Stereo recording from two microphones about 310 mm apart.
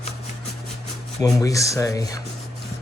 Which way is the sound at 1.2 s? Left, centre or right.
Centre.